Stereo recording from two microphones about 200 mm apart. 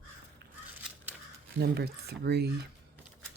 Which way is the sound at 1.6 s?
55° right (ahead or behind).